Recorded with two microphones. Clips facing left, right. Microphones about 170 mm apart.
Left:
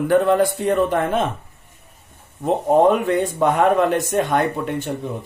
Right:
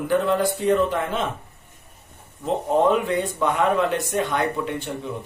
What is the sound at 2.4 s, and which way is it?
Speech, 60° left (ahead or behind).